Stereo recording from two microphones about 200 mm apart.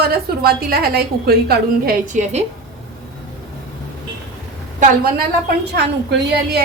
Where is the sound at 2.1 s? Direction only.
40° right (ahead or behind).